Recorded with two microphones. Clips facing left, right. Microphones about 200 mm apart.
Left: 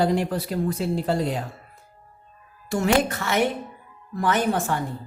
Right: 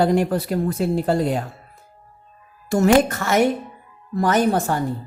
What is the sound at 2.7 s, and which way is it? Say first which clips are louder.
Speech: right 6 dB; 45° right (ahead or behind).